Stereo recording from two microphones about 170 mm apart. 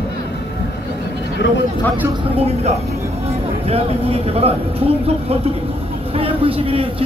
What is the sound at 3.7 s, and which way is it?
Speech, 35° right (ahead or behind).